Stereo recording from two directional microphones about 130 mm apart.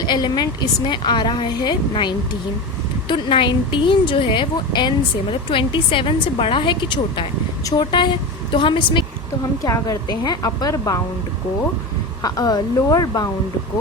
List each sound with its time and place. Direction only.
0.0 s a woman's voice: 30° left (ahead or behind)
9.6 s a woman's voice: 25° left (ahead or behind)
12.2 s a woman's voice: 30° left (ahead or behind)